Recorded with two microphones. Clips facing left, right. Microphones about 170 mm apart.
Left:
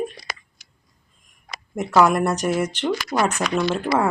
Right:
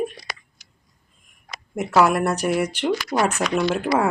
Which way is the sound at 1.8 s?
5° right (ahead or behind).